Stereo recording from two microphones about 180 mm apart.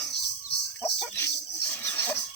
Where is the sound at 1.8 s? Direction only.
10° left (ahead or behind).